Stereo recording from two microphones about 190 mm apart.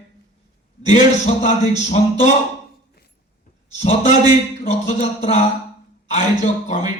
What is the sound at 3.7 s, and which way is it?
A man's voice, 40° left (ahead or behind).